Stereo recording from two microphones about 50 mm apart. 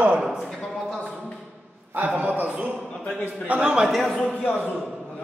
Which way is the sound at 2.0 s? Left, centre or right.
Right.